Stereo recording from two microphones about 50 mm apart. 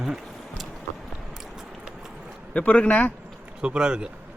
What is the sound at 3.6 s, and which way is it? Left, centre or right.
Speech, centre.